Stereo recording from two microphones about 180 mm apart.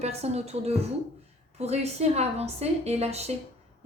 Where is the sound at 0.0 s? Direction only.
35° right (ahead or behind).